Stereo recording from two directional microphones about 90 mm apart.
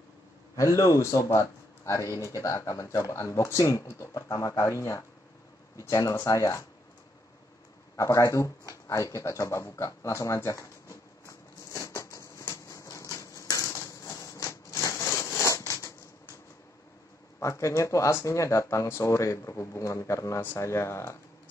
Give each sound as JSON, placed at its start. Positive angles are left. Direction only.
{"t": 0.6, "sound": "speech", "side_deg": 40}
{"t": 7.9, "sound": "a sound", "side_deg": 35}
{"t": 17.4, "sound": "speech", "side_deg": 35}